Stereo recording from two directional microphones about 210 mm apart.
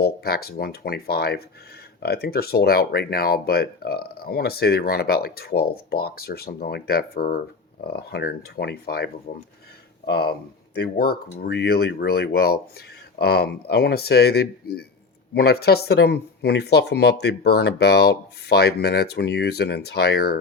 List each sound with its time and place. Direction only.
0.0 s speech: 50° left (ahead or behind)
10.1 s speech: 50° left (ahead or behind)